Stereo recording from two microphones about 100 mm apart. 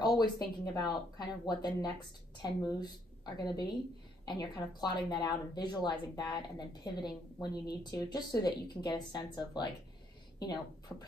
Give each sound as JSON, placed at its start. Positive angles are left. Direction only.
{"t": 0.0, "sound": "speech", "side_deg": 45}